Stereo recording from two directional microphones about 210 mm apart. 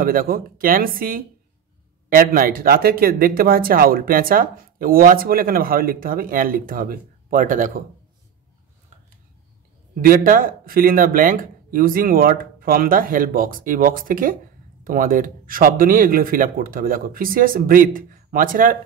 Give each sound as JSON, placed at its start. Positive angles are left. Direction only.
{"t": 0.0, "sound": "speech", "side_deg": -45}
{"t": 10.0, "sound": "speech", "side_deg": -40}